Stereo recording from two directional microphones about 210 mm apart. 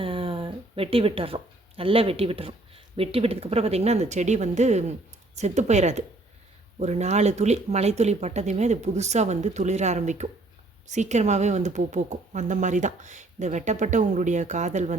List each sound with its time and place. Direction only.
0.0 s speech: 25° right (ahead or behind)